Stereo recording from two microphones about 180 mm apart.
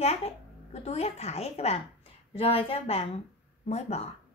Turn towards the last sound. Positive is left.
turn(degrees=35)  # may be behind; listen again after turning